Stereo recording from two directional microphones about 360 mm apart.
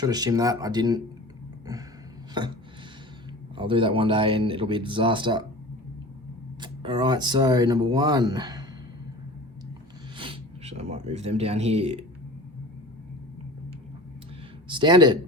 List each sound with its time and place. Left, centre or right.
0.0 s speech: centre
3.6 s speech: centre
6.6 s speech: centre
10.2 s speech: centre
14.7 s speech: centre